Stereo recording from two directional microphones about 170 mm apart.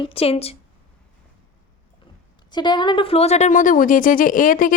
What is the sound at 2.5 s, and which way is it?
A woman's voice, 25° left (ahead or behind).